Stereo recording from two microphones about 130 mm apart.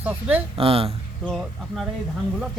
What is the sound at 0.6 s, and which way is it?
Speech, 45° right (ahead or behind).